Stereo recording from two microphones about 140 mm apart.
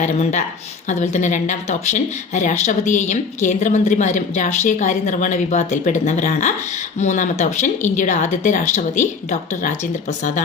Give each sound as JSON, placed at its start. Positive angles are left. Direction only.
{"t": 0.0, "sound": "speech", "side_deg": 55}